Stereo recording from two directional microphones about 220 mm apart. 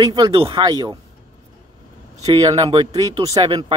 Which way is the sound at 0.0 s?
20° right (ahead or behind).